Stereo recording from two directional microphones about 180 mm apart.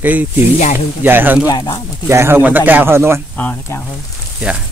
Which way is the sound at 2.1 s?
15° right (ahead or behind).